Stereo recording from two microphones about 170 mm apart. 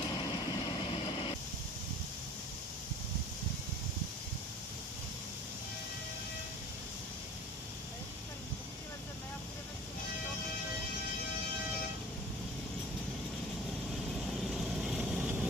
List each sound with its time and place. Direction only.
0.7 s vehicle: 30° left (ahead or behind)
14.5 s vehicle: 5° right (ahead or behind)